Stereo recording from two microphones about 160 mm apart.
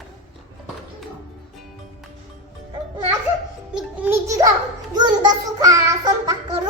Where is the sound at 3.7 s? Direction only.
10° right (ahead or behind).